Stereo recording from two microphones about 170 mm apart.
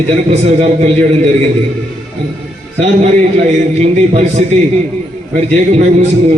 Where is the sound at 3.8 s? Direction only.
40° right (ahead or behind).